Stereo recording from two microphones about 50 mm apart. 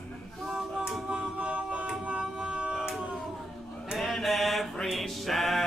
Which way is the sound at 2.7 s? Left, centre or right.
Centre.